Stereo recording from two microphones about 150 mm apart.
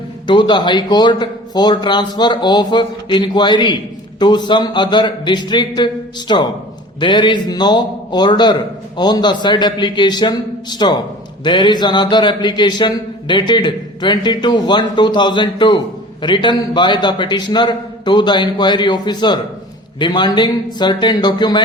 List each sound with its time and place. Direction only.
0.3 s a man's voice: 30° left (ahead or behind)